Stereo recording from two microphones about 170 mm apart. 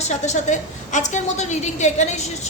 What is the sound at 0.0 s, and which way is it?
A woman's voice, 40° left (ahead or behind).